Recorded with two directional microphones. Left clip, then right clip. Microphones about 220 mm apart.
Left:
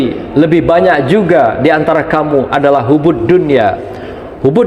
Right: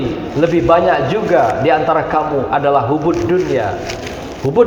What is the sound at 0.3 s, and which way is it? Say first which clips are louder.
A man's voice: left 3 dB; 60° left (ahead or behind).